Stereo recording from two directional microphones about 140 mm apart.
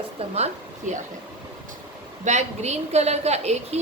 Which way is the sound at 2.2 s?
55° right (ahead or behind).